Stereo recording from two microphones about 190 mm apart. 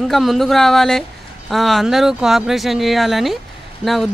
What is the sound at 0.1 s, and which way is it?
A man's voice, centre (ahead or behind).